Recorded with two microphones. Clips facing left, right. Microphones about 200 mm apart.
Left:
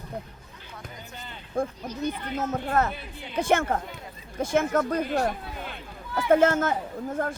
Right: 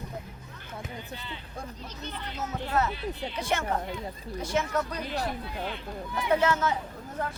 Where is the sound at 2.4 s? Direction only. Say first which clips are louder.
Left 3 dB; 50° left (ahead or behind).